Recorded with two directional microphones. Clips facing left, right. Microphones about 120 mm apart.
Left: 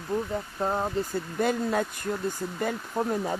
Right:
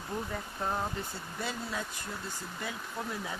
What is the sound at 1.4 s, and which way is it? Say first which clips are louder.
Speech: left 11 dB; 55° left (ahead or behind).